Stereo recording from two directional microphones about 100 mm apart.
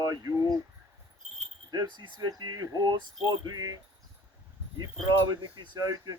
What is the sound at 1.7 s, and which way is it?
Speech, 40° right (ahead or behind).